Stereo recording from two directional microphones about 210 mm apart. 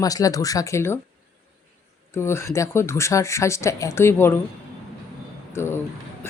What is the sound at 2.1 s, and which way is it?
Speech, 10° left (ahead or behind).